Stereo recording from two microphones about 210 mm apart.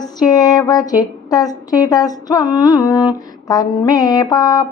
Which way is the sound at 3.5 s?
20° left (ahead or behind).